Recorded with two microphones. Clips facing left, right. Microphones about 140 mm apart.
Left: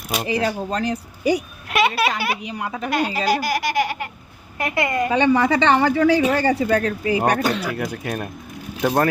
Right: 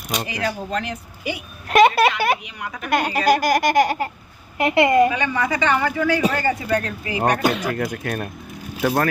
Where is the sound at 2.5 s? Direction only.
30° left (ahead or behind).